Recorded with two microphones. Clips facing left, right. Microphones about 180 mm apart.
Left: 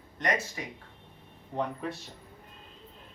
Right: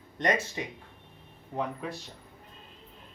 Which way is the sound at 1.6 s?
Centre (ahead or behind).